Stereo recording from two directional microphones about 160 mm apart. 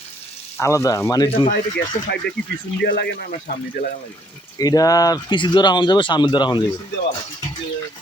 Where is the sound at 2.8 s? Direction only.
85° left.